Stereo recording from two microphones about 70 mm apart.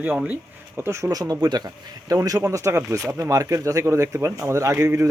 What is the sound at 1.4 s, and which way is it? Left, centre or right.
Speech, right.